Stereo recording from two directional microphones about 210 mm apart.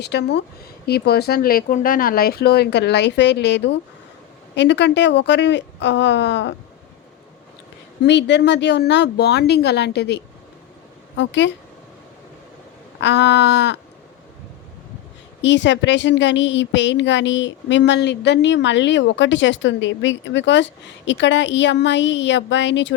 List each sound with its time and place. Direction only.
0.0 s a woman's voice: 55° left (ahead or behind)
8.0 s a woman's voice: 55° left (ahead or behind)
13.0 s a woman's voice: 55° left (ahead or behind)
15.4 s a woman's voice: 60° left (ahead or behind)